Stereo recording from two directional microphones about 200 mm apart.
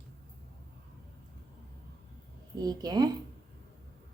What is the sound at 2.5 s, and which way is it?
Speech, 20° right (ahead or behind).